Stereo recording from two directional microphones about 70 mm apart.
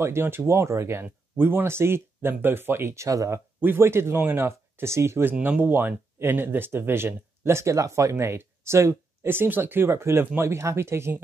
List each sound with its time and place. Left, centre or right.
0.0 s speech: right
1.0 s speech: right
3.6 s speech: right
5.4 s speech: right